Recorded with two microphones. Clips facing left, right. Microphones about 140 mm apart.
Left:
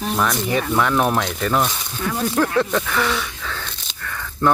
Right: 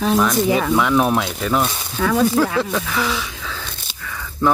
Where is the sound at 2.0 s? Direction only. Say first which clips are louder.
Right 6 dB; 90° right.